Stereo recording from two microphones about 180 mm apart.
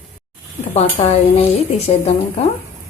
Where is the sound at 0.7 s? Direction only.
35° left (ahead or behind).